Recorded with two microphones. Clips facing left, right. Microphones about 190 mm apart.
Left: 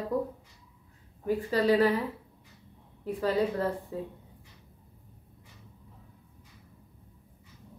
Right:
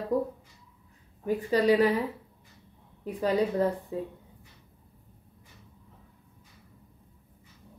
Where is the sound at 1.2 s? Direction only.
15° right (ahead or behind).